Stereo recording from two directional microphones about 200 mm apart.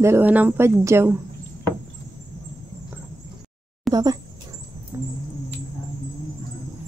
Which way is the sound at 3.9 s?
20° right (ahead or behind).